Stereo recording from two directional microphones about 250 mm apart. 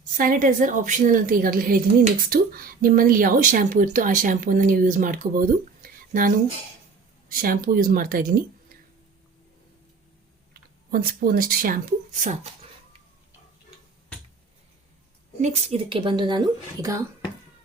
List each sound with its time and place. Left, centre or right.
0.2 s speech: right
10.9 s speech: right
15.4 s speech: right